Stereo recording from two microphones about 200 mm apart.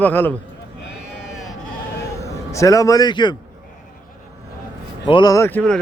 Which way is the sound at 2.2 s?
15° left (ahead or behind).